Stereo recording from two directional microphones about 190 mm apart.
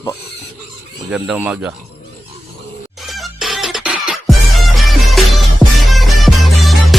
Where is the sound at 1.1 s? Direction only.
5° right (ahead or behind).